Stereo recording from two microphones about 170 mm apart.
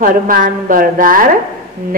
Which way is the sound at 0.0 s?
55° right (ahead or behind).